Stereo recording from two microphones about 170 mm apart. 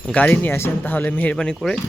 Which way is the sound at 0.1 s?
10° left (ahead or behind).